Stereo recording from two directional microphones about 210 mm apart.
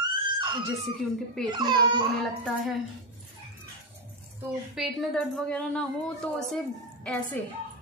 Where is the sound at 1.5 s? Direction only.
20° right (ahead or behind).